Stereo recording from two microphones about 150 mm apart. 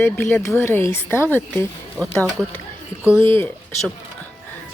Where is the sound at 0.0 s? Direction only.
15° left (ahead or behind).